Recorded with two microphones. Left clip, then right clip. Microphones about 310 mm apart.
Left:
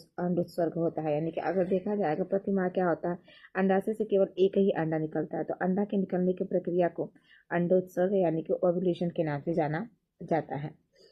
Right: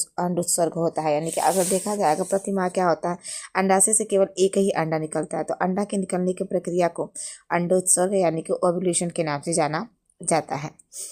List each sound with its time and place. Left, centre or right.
0.2 s speech: centre